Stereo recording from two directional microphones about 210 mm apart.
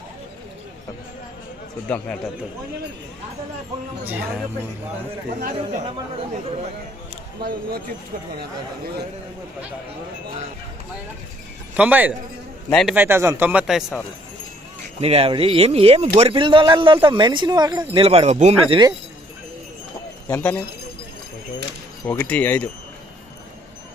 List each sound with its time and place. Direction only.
1.9 s speech: 5° left (ahead or behind)
5.4 s speech: 40° right (ahead or behind)
8.4 s speech: 45° right (ahead or behind)
11.8 s speech: 5° right (ahead or behind)
15.0 s speech: 30° right (ahead or behind)
20.3 s speech: 5° left (ahead or behind)
22.0 s speech: 10° left (ahead or behind)